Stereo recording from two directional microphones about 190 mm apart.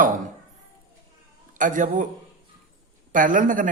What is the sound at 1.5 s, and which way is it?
Speech, 45° right (ahead or behind).